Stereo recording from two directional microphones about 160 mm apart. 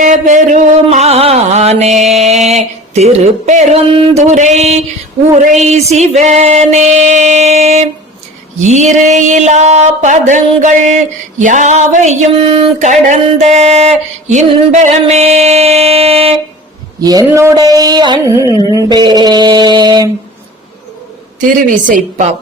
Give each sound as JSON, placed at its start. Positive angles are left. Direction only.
{"t": 0.0, "sound": "music", "side_deg": -50}
{"t": 5.3, "sound": "speech", "side_deg": -50}
{"t": 17.0, "sound": "a sound", "side_deg": -25}
{"t": 21.8, "sound": "speech", "side_deg": -55}